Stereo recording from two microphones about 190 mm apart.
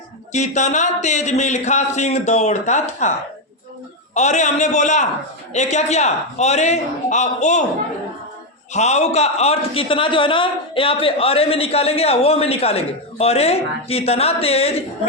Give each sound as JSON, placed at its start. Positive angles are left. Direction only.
{"t": 0.3, "sound": "a man's voice", "side_deg": 40}
{"t": 8.7, "sound": "a man's voice", "side_deg": 35}